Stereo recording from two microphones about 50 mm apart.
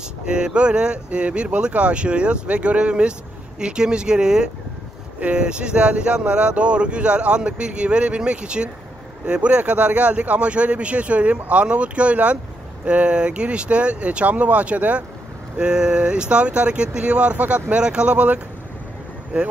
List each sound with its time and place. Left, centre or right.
0.2 s speech: centre
15.5 s speech: centre